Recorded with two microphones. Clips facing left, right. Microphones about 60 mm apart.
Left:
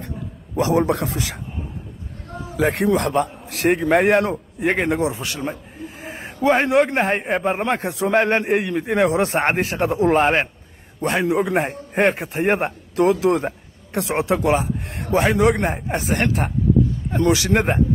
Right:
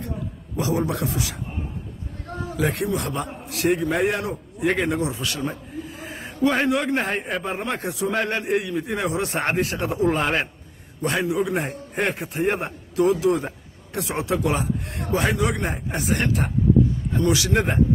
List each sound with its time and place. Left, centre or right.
0.6 s speech: left
2.5 s a man's voice: left
5.5 s a sound: left
6.5 s a man's voice: left
8.6 s speech: left
8.9 s a man's voice: left
17.1 s speech: left